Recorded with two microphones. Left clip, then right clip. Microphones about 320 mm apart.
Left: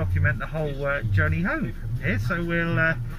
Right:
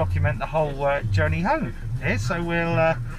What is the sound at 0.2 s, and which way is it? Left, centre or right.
Speech, right.